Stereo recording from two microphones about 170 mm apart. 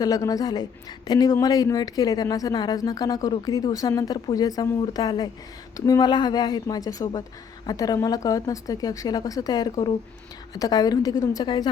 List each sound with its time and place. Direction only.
0.0 s a woman's voice: 20° left (ahead or behind)